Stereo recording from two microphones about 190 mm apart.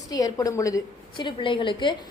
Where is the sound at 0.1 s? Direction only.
20° left (ahead or behind).